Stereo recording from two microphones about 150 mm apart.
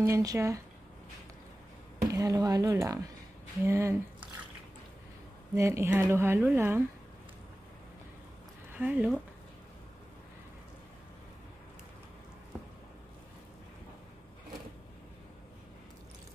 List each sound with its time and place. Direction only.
0.0 s speech: 20° right (ahead or behind)
2.1 s speech: 25° right (ahead or behind)
5.5 s speech: 20° right (ahead or behind)
8.7 s speech: 10° right (ahead or behind)